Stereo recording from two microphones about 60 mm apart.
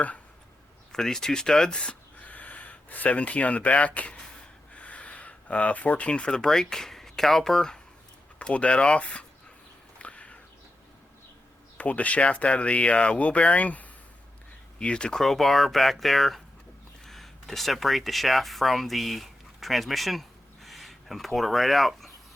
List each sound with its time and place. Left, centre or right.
0.9 s speech: centre
8.4 s speech: left
10.0 s a sound: left
11.8 s speech: left
15.2 s speech: centre